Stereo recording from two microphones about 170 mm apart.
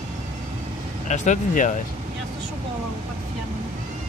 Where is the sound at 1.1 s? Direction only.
45° left (ahead or behind).